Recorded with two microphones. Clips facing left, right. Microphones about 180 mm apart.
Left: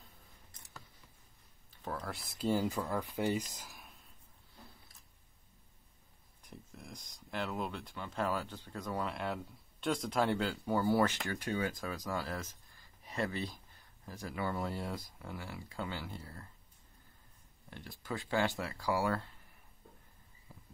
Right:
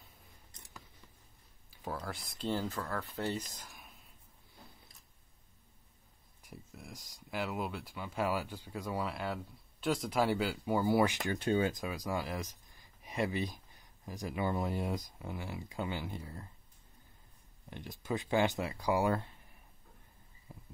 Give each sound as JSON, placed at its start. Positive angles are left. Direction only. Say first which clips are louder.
{"t": 1.7, "sound": "speech", "louder": "right 1 dB", "side_deg": -5}
{"t": 6.4, "sound": "speech", "louder": "right 1 dB", "side_deg": -5}
{"t": 11.3, "sound": "speech", "louder": "right 5 dB", "side_deg": -25}
{"t": 17.6, "sound": "speech", "louder": "right 4 dB", "side_deg": -20}
{"t": 20.5, "sound": "a sound", "louder": "right 4 dB", "side_deg": -20}